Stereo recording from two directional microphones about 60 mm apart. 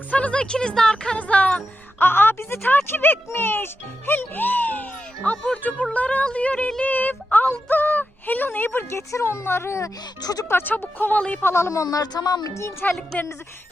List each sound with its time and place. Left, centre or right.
0.1 s music: left
0.4 s speech: centre
1.1 s music: left
2.0 s speech: left
5.9 s a sound: left
6.8 s speech: left
8.9 s speech: left
10.5 s speech: left
11.4 s speech: left
11.7 s speech: left
12.8 s a sound: left